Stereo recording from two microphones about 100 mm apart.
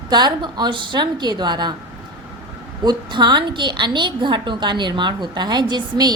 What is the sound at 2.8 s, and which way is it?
A woman's voice, 50° right (ahead or behind).